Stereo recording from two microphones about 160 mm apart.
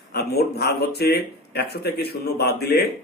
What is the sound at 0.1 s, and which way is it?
Speech, 85° left.